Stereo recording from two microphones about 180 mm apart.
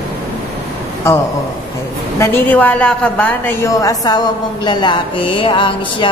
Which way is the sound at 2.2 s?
10° left (ahead or behind).